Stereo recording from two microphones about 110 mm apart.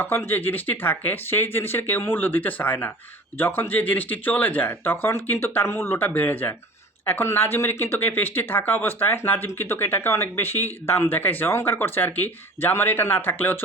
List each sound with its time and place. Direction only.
0.0 s speech: 20° left (ahead or behind)